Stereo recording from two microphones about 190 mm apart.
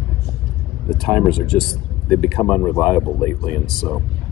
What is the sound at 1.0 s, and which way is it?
Speech, centre (ahead or behind).